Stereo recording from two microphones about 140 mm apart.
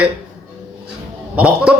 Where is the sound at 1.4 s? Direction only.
10° right (ahead or behind).